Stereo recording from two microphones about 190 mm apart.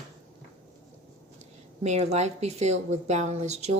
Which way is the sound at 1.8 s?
35° right (ahead or behind).